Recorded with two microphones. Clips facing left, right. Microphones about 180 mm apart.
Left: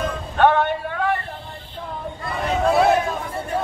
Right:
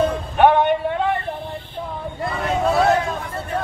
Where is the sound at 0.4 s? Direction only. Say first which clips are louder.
Right 3 dB; 15° right (ahead or behind).